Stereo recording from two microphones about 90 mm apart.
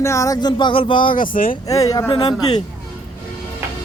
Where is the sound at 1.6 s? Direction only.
40° left (ahead or behind).